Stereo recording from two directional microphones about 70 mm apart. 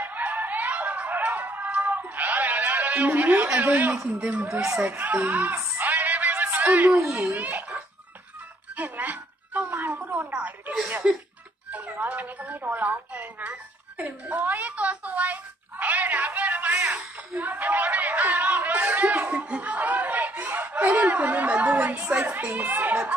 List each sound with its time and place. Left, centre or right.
0.0 s music: right
3.1 s speech: right
5.8 s music: right
7.3 s speech: right
8.7 s a sound: right
11.0 s music: centre
11.7 s a sound: right
22.2 s speech: right